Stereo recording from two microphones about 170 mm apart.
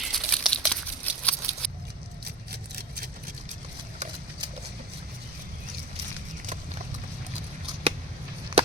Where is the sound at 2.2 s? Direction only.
70° right (ahead or behind).